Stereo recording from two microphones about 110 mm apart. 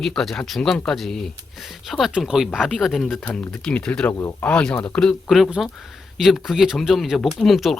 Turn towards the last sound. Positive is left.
turn(degrees=0)  # may be behind; listen again after turning